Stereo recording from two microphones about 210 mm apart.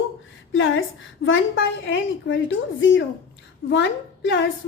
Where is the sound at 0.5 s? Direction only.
65° left (ahead or behind).